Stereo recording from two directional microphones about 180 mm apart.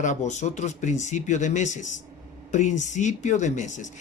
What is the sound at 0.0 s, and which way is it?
Speech, 40° left (ahead or behind).